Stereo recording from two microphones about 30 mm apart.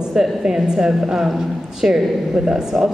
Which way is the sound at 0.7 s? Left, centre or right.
Right.